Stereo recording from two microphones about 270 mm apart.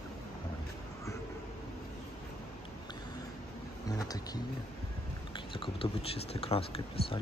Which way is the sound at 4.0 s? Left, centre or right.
Centre.